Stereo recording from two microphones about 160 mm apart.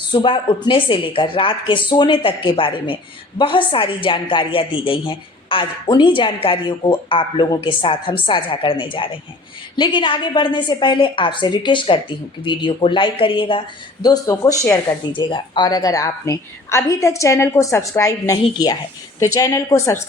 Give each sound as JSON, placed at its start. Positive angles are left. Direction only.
{"t": 0.1, "sound": "a woman's voice", "side_deg": 30}